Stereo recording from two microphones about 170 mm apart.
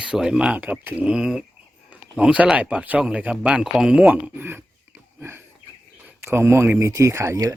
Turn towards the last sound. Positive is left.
turn(degrees=-15)  # may be behind; listen again after turning